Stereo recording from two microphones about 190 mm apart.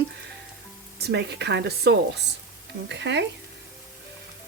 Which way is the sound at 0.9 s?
60° right (ahead or behind).